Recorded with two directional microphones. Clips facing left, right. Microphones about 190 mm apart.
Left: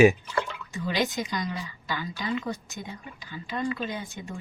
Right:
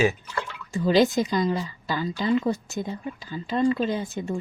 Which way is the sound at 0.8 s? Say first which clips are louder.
Right 9 dB; 30° right (ahead or behind).